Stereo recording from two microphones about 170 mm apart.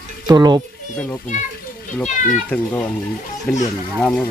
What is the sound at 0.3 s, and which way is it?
Speech, 25° right (ahead or behind).